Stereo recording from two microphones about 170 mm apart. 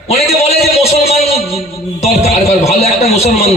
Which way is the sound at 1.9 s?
40° left (ahead or behind).